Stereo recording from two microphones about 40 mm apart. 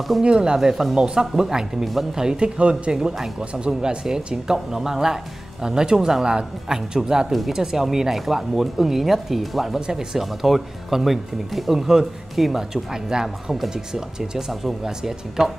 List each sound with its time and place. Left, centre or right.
0.2 s speech: right
0.6 s speech: centre; by 2.9 s right
2.9 s speech: centre